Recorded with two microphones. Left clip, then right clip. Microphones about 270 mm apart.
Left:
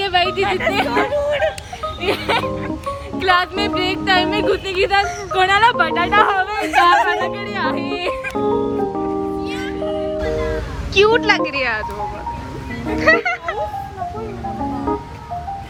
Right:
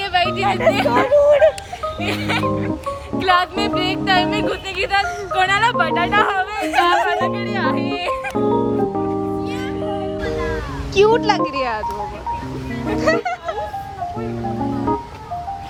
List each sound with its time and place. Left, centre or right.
0.0 s hubbub: centre
0.7 s speech: right
1.0 s music: right
1.8 s music: centre
3.2 s a woman's voice: centre
6.6 s speech: left
6.8 s speech: centre
10.2 s music: centre
10.9 s speech: centre
12.9 s speech: centre